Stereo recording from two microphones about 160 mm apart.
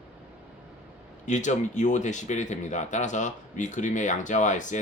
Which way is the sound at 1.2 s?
50° left (ahead or behind).